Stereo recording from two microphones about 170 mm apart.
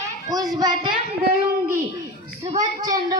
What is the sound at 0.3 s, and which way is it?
Speech, 20° right (ahead or behind).